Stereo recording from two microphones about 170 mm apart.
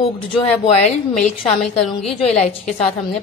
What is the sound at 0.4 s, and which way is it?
A woman's voice, 35° left (ahead or behind).